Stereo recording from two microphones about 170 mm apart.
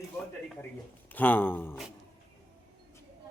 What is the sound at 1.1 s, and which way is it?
Speech, 10° left (ahead or behind).